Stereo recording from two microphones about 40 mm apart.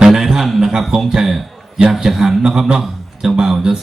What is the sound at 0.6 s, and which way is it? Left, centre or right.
Speech, centre.